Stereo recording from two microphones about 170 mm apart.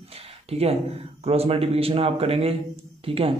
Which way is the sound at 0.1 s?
35° right (ahead or behind).